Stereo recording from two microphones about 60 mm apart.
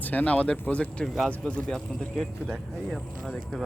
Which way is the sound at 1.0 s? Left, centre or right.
Centre.